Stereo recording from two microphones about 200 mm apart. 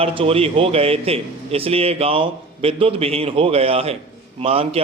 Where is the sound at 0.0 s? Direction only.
25° right (ahead or behind).